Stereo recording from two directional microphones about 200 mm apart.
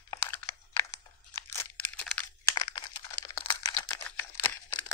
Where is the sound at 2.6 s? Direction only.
20° left (ahead or behind).